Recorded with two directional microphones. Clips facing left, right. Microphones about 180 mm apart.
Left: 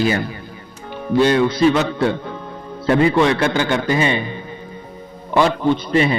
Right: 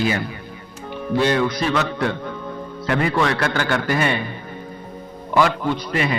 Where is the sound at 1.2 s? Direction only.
25° left (ahead or behind).